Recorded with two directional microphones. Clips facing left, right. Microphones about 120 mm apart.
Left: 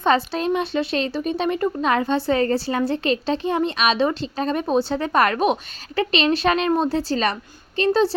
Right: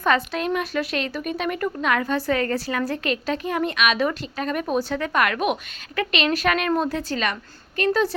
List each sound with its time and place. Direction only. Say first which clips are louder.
0.0 s a woman's voice: left 2 dB; 30° left (ahead or behind)